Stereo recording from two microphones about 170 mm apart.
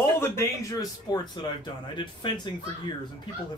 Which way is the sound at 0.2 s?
15° left (ahead or behind).